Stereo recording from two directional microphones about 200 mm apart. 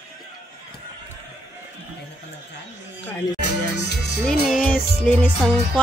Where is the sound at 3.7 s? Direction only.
55° left (ahead or behind).